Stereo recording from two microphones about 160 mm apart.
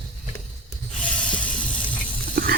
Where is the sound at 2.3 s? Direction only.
70° right (ahead or behind).